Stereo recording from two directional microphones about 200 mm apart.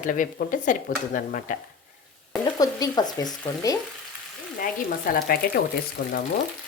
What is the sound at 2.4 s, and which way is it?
Frying, 20° left (ahead or behind).